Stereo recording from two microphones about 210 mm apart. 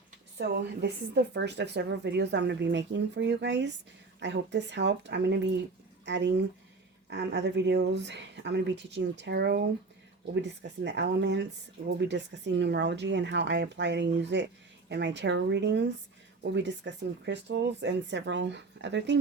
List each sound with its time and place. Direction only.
0.3 s a woman's voice: 55° right (ahead or behind)